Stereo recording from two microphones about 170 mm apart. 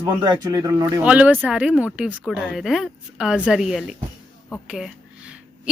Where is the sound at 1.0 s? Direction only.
10° right (ahead or behind).